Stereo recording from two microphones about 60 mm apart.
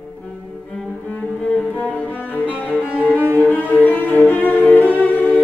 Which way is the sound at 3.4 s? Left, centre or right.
Left.